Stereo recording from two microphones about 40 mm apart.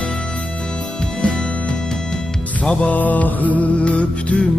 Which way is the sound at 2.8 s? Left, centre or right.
Left.